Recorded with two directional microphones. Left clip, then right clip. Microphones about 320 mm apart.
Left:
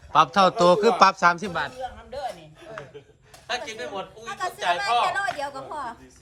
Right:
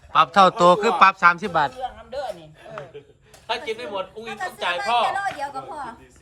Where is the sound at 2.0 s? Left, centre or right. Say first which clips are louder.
Right 2 dB; centre.